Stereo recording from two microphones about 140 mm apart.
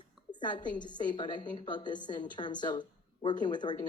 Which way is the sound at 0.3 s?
35° left (ahead or behind).